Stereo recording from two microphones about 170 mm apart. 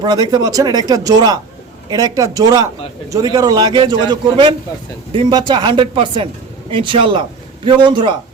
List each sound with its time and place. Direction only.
0.0 s a man's voice: 25° right (ahead or behind)